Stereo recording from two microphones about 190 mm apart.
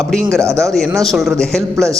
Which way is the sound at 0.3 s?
15° right (ahead or behind).